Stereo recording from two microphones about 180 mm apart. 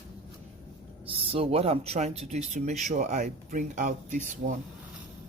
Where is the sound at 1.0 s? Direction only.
30° right (ahead or behind).